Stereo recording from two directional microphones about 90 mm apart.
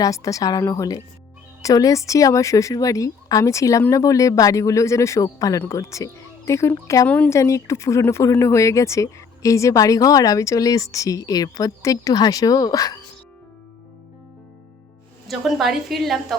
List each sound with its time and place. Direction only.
0.0 s speech: 40° left (ahead or behind)
15.3 s a woman's voice: centre (ahead or behind)